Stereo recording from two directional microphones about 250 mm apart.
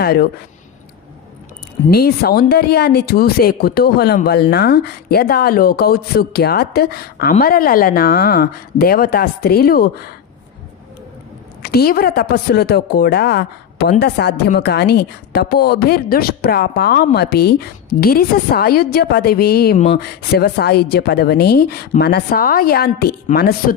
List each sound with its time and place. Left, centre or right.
0.0 s speech: left
1.9 s a woman's voice: left
11.6 s a woman's voice: left